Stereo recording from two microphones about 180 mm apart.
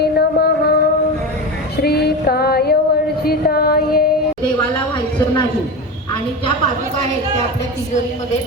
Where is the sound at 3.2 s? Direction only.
60° left (ahead or behind).